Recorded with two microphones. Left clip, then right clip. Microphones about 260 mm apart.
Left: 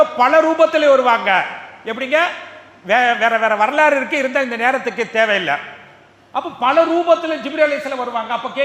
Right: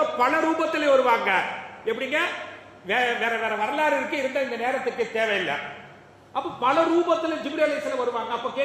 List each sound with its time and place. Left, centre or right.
0.2 s a man's voice: left